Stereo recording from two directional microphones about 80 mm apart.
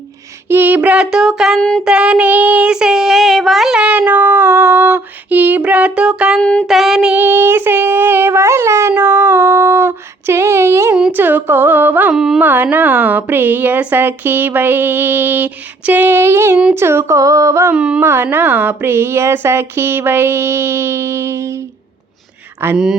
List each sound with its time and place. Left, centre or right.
0.4 s child singing: right; by 3.8 s centre
3.8 s female singing: centre
6.4 s child singing: centre
6.7 s child singing: centre
7.1 s a woman's voice: right
8.9 s female singing: right
11.1 s a woman's voice: right
12.1 s child singing: centre
12.4 s a woman's voice: right
17.7 s child singing: centre
18.0 s a woman's voice: right
22.6 s a woman's voice: right